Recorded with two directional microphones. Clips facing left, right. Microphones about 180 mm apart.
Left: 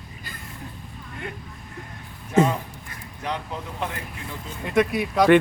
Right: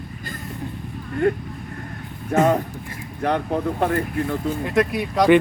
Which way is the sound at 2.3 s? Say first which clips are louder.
Right 2 dB; 55° right (ahead or behind).